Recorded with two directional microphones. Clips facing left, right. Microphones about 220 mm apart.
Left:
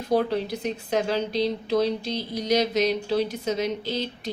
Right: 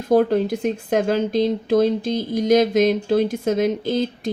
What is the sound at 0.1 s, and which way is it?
A woman's voice, 45° right (ahead or behind).